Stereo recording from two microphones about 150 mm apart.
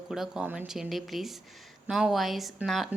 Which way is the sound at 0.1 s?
5° right (ahead or behind).